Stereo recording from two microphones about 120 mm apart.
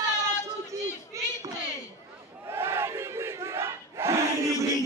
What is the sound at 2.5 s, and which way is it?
Battle cry, 20° right (ahead or behind).